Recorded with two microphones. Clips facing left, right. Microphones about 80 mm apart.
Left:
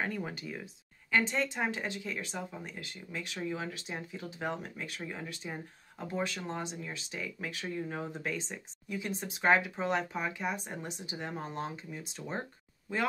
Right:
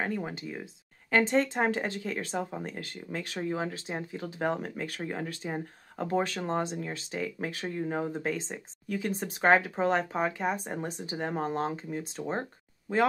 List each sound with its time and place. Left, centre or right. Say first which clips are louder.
0.0 s speech: right 3 dB; right
1.1 s speech: right 5 dB; right
8.8 s speech: right 5 dB; right